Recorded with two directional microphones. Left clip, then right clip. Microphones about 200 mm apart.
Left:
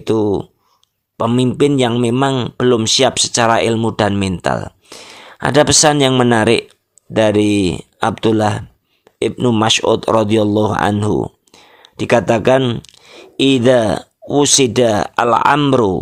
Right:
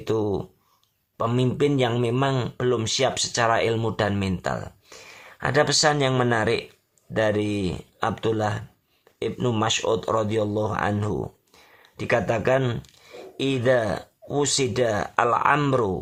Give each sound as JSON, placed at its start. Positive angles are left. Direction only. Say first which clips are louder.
{"t": 0.0, "sound": "speech", "louder": "left 9 dB", "side_deg": 35}